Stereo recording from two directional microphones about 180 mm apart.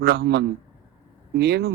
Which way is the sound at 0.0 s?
60° right (ahead or behind).